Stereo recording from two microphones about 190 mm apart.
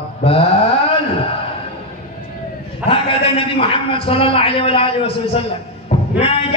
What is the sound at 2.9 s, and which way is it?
A man's voice, 30° left (ahead or behind).